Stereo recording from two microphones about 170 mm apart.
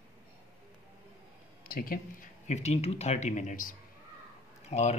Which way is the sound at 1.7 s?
55° left (ahead or behind).